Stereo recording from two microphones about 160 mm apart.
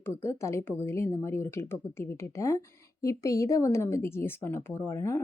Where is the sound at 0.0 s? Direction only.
15° left (ahead or behind).